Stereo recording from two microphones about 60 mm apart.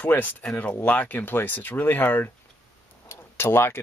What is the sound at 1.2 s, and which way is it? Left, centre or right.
Speech, left.